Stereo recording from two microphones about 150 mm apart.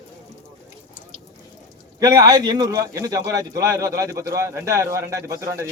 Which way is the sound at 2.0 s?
25° right (ahead or behind).